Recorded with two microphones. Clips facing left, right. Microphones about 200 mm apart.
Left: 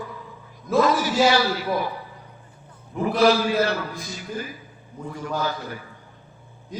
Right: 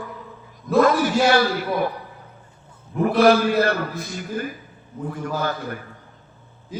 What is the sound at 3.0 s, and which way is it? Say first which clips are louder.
A man's voice: right 3 dB; 55° right (ahead or behind).